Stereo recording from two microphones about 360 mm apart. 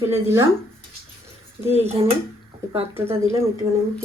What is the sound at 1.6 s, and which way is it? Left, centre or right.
Speech, centre.